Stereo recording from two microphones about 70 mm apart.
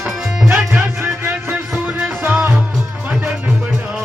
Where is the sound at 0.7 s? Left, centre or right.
Right.